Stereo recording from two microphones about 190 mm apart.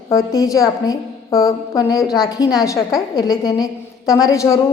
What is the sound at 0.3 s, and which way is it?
A woman's voice, 20° left (ahead or behind).